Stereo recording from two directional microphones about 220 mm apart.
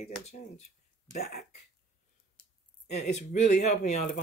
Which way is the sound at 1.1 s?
45° left (ahead or behind).